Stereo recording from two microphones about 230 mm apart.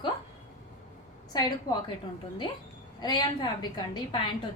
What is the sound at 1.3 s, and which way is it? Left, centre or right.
Speech, centre.